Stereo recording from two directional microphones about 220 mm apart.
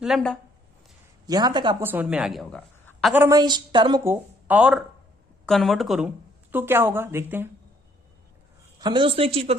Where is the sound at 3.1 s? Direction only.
10° right (ahead or behind).